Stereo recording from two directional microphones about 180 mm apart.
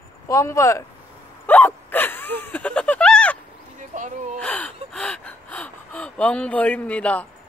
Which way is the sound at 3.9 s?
45° right (ahead or behind).